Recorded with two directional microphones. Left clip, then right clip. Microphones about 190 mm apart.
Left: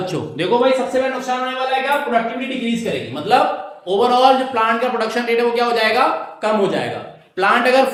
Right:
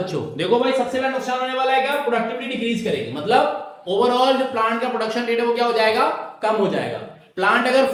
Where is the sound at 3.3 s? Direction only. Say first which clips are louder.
Left 3 dB; 20° left (ahead or behind).